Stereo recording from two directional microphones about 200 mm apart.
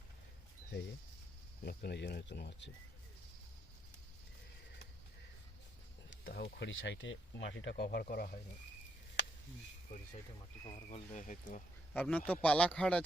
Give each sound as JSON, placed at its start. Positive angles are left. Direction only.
{"t": 1.6, "sound": "speech", "side_deg": 55}
{"t": 6.1, "sound": "speech", "side_deg": 65}
{"t": 10.9, "sound": "speech", "side_deg": 40}
{"t": 11.9, "sound": "speech", "side_deg": 5}